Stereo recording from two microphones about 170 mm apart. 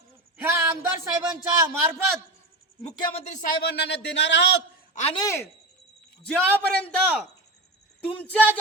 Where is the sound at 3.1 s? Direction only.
45° left (ahead or behind).